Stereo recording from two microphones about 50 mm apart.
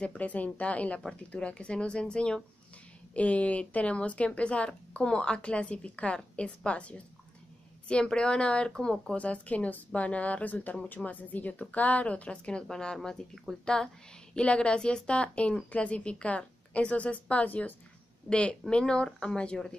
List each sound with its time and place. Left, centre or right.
0.0 s speech: left; by 13.4 s centre
14.3 s speech: left
18.3 s speech: left